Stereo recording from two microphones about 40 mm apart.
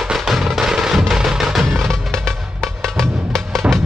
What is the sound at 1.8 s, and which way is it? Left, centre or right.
Music, centre.